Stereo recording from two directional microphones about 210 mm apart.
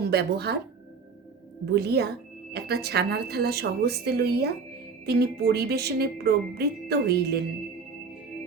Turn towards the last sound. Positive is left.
turn(degrees=-50)  # may be behind; listen again after turning